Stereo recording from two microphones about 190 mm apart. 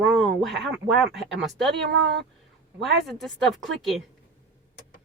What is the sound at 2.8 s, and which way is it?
Speech, centre (ahead or behind).